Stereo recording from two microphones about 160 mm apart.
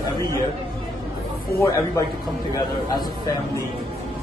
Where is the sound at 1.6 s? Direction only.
20° left (ahead or behind).